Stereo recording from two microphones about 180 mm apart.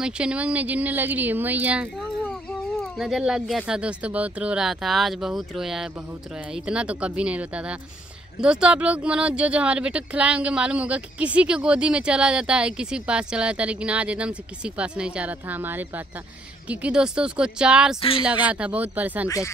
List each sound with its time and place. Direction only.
0.0 s speech: 5° right (ahead or behind)
19.2 s speech: 15° left (ahead or behind)